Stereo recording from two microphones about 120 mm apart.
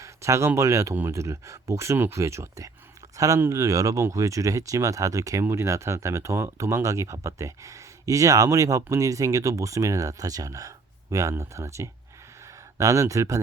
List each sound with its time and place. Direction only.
0.0 s speech: 25° right (ahead or behind)